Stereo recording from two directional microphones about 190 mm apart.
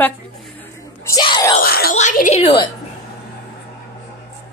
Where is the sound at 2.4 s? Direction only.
25° left (ahead or behind).